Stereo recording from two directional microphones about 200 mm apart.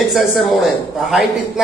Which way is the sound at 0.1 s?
Centre (ahead or behind).